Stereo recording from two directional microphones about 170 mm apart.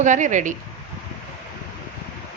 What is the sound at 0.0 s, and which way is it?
Speech, 45° right (ahead or behind).